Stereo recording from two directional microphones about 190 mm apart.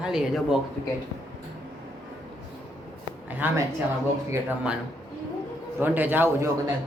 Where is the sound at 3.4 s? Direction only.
10° right (ahead or behind).